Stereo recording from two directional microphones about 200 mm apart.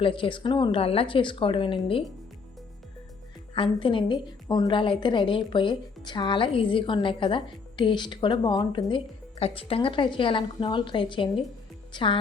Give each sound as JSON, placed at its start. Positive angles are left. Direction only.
{"t": 0.0, "sound": "a woman's voice", "side_deg": 25}
{"t": 3.5, "sound": "a woman's voice", "side_deg": 25}